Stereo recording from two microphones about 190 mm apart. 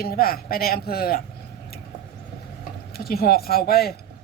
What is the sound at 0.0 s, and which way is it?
Speech, 50° left (ahead or behind).